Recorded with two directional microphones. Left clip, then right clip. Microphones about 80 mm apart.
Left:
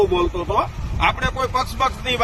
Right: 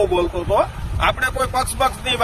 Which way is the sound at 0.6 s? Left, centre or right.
Right.